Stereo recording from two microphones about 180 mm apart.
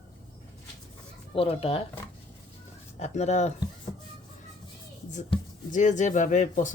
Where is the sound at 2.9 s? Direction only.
40° left (ahead or behind).